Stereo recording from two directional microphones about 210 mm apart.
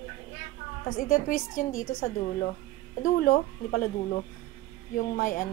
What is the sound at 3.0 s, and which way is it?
A woman's voice, 45° left (ahead or behind).